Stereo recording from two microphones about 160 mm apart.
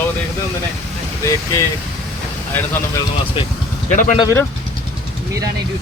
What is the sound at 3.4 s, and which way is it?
Speech, 35° left (ahead or behind).